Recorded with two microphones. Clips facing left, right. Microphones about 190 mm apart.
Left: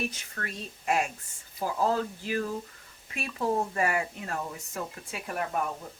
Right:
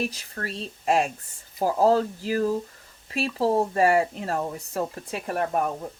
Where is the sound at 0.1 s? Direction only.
35° right (ahead or behind).